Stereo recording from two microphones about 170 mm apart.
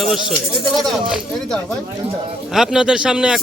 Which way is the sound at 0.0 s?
Centre (ahead or behind).